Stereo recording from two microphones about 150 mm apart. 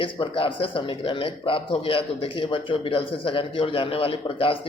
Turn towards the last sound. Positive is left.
turn(degrees=35)  # may be behind; listen again after turning